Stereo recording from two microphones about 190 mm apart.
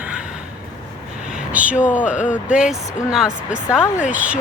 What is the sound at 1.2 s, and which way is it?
Speech, 5° right (ahead or behind).